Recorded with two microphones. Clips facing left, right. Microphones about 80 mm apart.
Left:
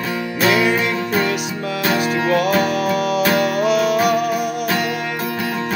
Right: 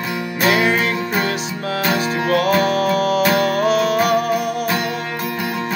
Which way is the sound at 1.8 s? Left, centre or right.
Right.